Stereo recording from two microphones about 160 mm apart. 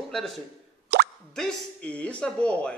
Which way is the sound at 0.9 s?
90° right.